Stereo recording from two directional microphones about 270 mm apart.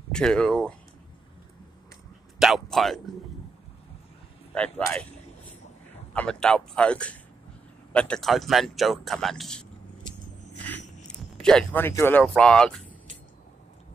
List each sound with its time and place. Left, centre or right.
0.1 s speech: centre
2.3 s a sound: centre
4.6 s speech: centre
6.1 s speech: centre
11.3 s speech: centre